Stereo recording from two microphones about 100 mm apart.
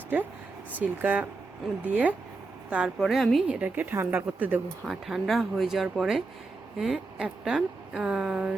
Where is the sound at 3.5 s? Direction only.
15° right (ahead or behind).